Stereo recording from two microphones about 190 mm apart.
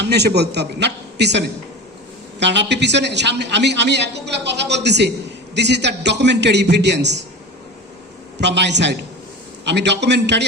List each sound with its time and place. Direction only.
0.0 s a man's voice: 60° right (ahead or behind)
8.4 s a man's voice: 65° right (ahead or behind)